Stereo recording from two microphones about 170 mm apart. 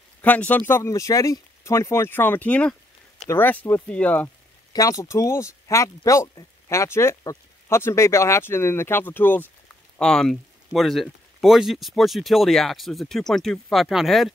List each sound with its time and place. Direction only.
0.2 s speech: 10° left (ahead or behind)
4.7 s speech: 20° left (ahead or behind); by 14.3 s centre (ahead or behind)